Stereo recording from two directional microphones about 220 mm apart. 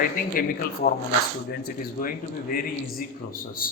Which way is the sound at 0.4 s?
40° left (ahead or behind).